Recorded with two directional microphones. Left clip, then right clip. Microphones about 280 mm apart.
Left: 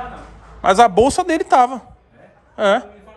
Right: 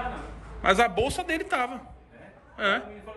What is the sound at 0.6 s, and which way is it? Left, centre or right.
Speech, centre.